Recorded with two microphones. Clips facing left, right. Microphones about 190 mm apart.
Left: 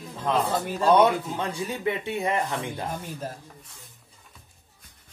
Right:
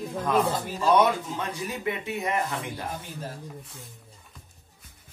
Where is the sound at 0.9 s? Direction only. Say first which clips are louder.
Left 2 dB; 30° left (ahead or behind).